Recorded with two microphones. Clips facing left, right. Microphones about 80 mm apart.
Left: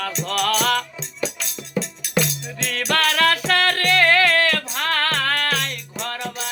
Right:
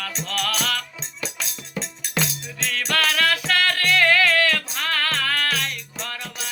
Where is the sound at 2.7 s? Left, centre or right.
Left.